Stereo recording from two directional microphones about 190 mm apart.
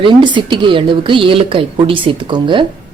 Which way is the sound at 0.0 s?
25° right (ahead or behind).